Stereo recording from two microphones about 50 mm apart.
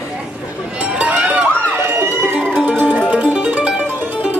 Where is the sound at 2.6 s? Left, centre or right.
Right.